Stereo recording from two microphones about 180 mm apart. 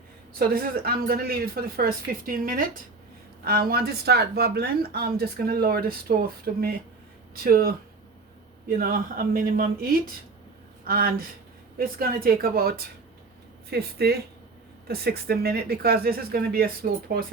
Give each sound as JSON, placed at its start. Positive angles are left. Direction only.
{"t": 0.3, "sound": "speech", "side_deg": -55}